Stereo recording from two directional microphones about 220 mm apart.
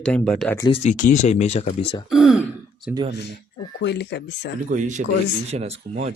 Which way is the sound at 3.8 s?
50° left (ahead or behind).